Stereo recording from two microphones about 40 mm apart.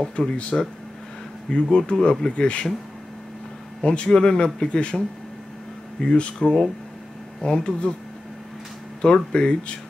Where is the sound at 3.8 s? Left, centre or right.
Left.